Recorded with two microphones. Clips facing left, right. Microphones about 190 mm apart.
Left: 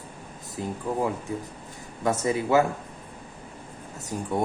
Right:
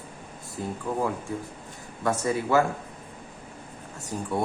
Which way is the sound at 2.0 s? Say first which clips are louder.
Left 1 dB; 20° left (ahead or behind).